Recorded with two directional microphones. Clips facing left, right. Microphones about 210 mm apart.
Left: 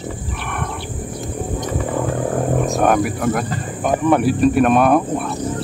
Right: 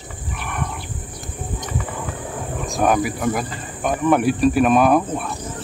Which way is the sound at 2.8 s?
Centre (ahead or behind).